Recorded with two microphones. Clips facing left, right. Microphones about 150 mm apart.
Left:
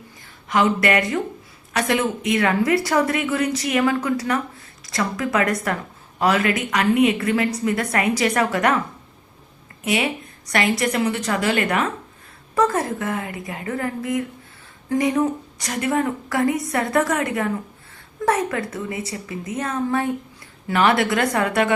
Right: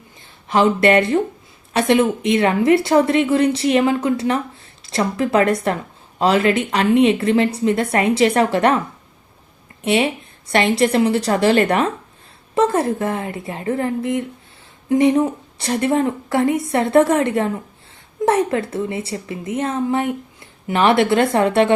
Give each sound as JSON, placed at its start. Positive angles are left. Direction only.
{"t": 0.4, "sound": "a woman's voice", "side_deg": -25}
{"t": 9.8, "sound": "a woman's voice", "side_deg": -25}